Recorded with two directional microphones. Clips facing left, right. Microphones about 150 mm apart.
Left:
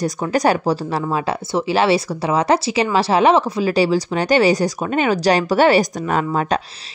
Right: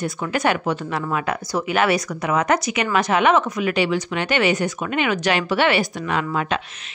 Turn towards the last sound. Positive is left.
turn(degrees=40)  # may be behind; listen again after turning